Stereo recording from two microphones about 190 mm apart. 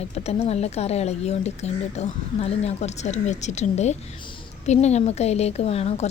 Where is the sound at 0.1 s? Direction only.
35° left (ahead or behind).